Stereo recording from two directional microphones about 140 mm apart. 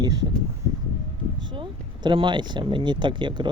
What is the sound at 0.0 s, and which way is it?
Speech, 30° right (ahead or behind).